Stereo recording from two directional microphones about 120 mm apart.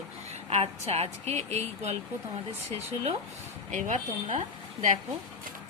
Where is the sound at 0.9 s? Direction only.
60° right (ahead or behind).